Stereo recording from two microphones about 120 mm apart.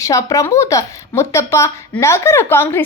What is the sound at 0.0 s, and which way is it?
A woman's voice, 25° left (ahead or behind).